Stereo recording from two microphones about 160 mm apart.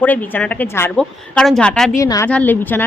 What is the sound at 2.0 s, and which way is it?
Speech, 20° left (ahead or behind).